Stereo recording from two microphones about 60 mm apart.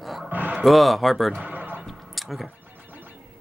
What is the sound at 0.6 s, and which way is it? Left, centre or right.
Speech, centre.